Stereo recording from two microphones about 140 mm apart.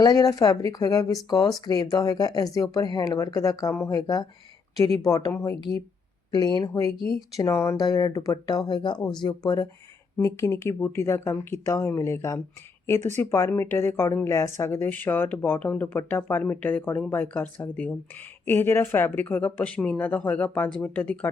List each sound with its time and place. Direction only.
0.0 s a woman's voice: 25° left (ahead or behind)